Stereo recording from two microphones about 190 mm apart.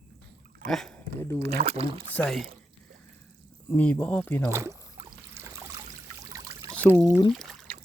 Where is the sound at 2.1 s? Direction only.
5° left (ahead or behind).